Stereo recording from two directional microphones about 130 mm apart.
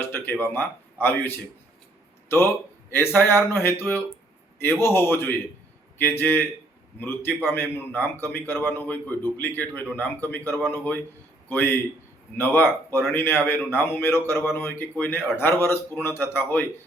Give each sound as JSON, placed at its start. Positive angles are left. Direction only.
{"t": 0.0, "sound": "a man's voice", "side_deg": 15}
{"t": 3.2, "sound": "a man's voice", "side_deg": 15}
{"t": 7.5, "sound": "a man's voice", "side_deg": 15}